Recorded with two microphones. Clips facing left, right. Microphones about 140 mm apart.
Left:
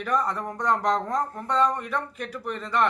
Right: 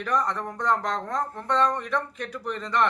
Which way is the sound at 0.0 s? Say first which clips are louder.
Even; 5° left (ahead or behind).